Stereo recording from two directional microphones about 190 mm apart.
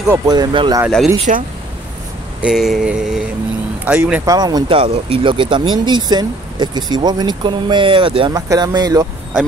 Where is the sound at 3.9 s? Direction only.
10° right (ahead or behind).